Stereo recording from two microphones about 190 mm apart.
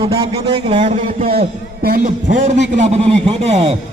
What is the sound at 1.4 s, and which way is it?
A man's voice, 50° right (ahead or behind).